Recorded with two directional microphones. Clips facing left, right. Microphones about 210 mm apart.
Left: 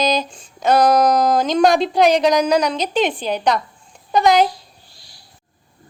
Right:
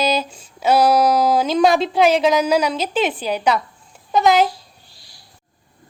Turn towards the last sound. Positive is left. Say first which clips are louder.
# left 1 dB
turn(degrees=0)  # may be behind; listen again after turning